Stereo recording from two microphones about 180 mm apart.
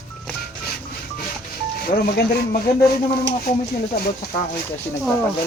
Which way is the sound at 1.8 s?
55° left (ahead or behind).